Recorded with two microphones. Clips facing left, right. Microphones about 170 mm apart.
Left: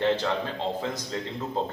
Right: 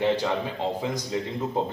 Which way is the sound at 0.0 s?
10° right (ahead or behind).